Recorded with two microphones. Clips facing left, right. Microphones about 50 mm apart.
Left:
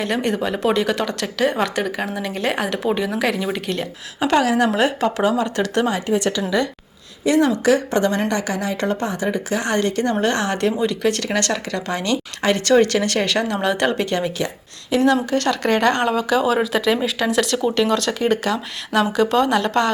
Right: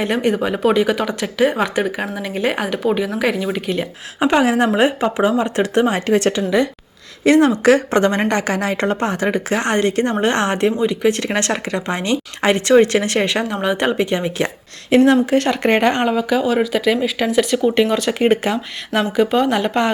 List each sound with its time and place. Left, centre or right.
0.0 s speech: centre
4.2 s speech: right
6.1 s a woman's voice: right
7.3 s a woman's voice: right
9.7 s a woman's voice: right
10.6 s speech: centre
13.5 s speech: centre
14.3 s a woman's voice: right
15.0 s speech: right
16.1 s speech: centre
18.1 s speech: right
19.1 s speech: centre